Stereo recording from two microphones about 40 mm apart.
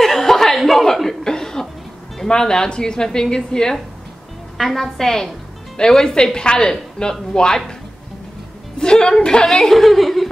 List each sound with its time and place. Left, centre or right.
0.0 s chuckle: centre
2.2 s a woman's voice: centre
4.6 s a woman's voice: centre
8.7 s a woman's voice: left
9.5 s speech: centre